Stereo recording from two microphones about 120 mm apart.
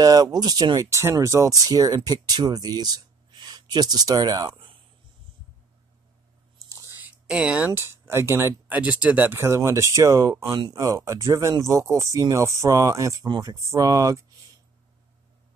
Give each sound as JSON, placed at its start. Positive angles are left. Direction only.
{"t": 0.0, "sound": "speech", "side_deg": -30}
{"t": 6.7, "sound": "speech", "side_deg": -15}